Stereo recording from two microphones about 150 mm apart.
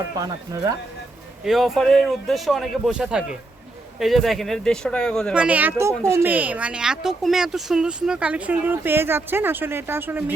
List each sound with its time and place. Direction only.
0.2 s speech: 25° right (ahead or behind)
1.5 s speech: centre (ahead or behind)
5.3 s speech: 10° right (ahead or behind)